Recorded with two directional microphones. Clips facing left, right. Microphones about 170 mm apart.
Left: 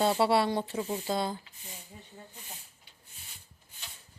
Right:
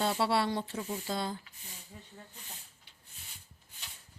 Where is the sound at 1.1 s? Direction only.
15° left (ahead or behind).